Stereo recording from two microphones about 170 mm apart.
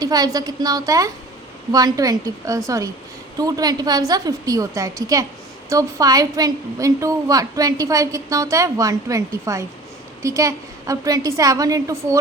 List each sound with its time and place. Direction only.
0.0 s a woman's voice: 20° right (ahead or behind)